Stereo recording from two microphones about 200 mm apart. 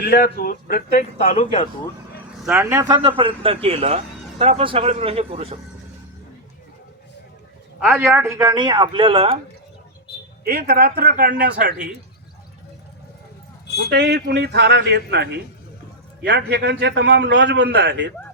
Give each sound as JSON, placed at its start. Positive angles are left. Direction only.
{"t": 0.0, "sound": "a man's voice", "side_deg": 45}
{"t": 2.4, "sound": "speech", "side_deg": -10}
{"t": 7.8, "sound": "speech", "side_deg": -5}
{"t": 10.4, "sound": "a man's voice", "side_deg": -50}
{"t": 13.9, "sound": "a man's voice", "side_deg": -55}